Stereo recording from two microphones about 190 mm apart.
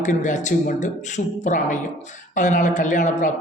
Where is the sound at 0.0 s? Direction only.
40° left (ahead or behind).